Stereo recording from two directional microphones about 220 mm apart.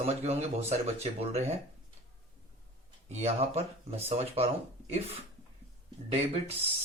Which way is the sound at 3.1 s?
30° right (ahead or behind).